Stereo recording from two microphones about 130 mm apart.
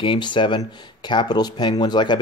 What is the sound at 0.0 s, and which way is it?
Speech, 40° left (ahead or behind).